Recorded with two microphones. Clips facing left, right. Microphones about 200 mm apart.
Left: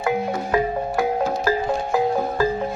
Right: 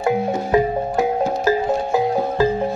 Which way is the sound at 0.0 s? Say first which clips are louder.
Right 3 dB; 25° right (ahead or behind).